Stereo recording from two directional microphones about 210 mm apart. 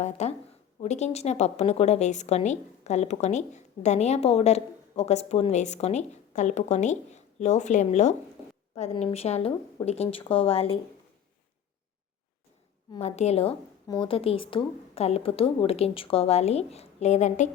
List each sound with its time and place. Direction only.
0.0 s a woman's voice: 30° left (ahead or behind)
12.9 s a woman's voice: 30° left (ahead or behind)